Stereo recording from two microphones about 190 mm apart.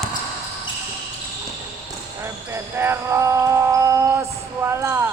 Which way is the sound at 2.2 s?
15° right (ahead or behind).